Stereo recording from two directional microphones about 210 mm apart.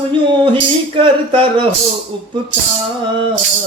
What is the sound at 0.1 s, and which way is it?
Speech, 25° right (ahead or behind).